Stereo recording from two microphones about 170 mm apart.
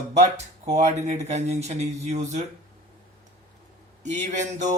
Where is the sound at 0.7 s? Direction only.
40° right (ahead or behind).